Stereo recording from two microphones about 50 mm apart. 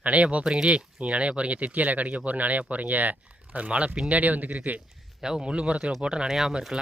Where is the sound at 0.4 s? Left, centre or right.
Centre; by 4.8 s right.